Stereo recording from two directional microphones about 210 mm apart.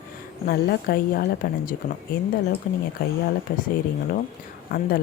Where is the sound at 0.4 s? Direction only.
45° left (ahead or behind).